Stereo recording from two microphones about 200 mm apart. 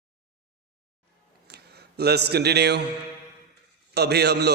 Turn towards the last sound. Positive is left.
turn(degrees=-55)  # may be behind; listen again after turning